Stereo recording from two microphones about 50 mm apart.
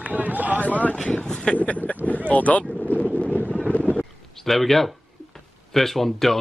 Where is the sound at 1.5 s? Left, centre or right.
Left.